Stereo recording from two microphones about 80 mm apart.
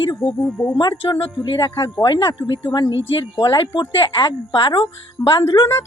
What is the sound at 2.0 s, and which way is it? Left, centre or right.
Speech, left.